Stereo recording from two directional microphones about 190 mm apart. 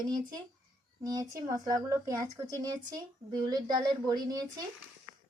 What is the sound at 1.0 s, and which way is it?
Speech, 20° right (ahead or behind).